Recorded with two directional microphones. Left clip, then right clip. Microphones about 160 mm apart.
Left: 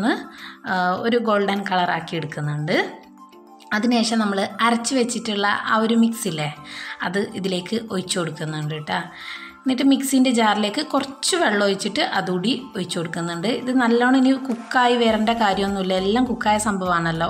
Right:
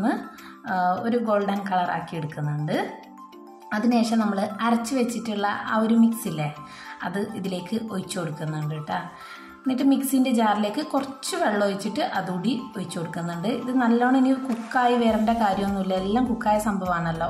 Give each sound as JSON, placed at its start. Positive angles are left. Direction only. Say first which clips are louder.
{"t": 0.7, "sound": "a woman's voice", "louder": "left 3 dB", "side_deg": 20}